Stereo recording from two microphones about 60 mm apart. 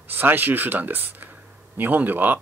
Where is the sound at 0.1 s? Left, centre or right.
Right.